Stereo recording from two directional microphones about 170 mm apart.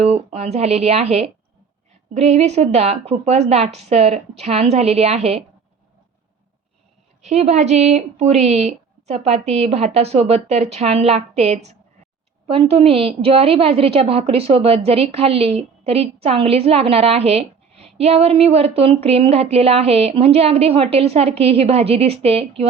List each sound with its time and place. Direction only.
0.0 s a woman's voice: 40° right (ahead or behind)
7.2 s a woman's voice: 40° right (ahead or behind)